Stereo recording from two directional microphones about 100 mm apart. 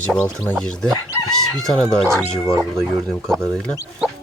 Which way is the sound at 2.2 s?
25° right (ahead or behind).